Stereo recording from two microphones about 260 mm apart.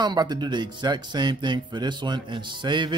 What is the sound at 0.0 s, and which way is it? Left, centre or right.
Speech, centre.